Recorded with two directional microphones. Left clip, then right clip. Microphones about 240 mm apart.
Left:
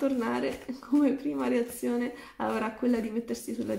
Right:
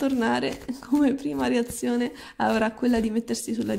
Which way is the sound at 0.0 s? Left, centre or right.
Right.